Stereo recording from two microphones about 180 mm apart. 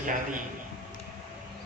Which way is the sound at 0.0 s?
45° right (ahead or behind).